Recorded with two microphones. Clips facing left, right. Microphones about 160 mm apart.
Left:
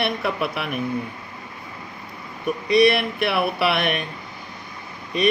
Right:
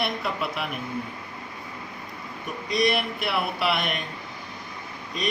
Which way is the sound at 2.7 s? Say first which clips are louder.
Left 7 dB; 65° left (ahead or behind).